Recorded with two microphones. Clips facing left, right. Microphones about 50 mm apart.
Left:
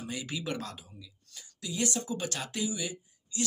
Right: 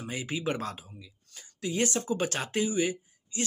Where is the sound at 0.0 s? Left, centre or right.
Right.